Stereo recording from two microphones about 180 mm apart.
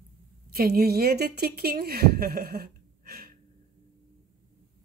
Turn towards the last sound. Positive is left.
turn(degrees=-55)  # may be behind; listen again after turning